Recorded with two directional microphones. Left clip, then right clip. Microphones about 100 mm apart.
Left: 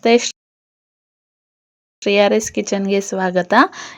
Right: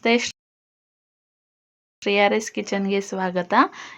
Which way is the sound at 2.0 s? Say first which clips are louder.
Left 5 dB; 30° left (ahead or behind).